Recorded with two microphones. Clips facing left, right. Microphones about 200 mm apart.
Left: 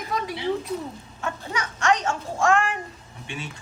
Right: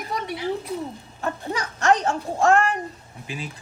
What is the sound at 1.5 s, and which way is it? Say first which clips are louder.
A woman's voice: right 3 dB; 35° right (ahead or behind).